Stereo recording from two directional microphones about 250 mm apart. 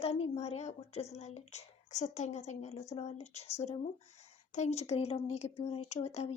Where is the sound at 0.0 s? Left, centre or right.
Left.